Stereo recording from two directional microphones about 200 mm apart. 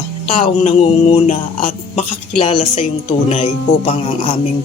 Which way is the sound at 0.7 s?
35° left (ahead or behind).